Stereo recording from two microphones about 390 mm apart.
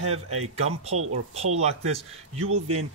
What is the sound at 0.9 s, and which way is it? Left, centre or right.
Speech, right.